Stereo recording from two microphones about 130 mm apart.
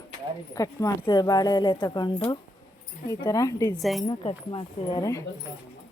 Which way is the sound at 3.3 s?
25° left (ahead or behind).